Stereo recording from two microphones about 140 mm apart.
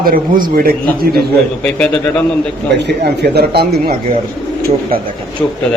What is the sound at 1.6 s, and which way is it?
Speech, 5° left (ahead or behind).